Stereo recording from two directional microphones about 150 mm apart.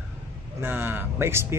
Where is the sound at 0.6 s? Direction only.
15° right (ahead or behind).